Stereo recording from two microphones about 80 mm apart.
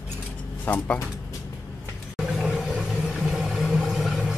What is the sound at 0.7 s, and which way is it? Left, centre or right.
Speech, left.